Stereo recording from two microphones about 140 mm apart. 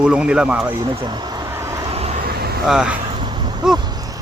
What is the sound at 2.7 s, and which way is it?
Speech, 5° right (ahead or behind).